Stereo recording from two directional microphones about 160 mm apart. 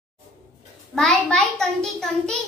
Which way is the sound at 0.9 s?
5° left (ahead or behind).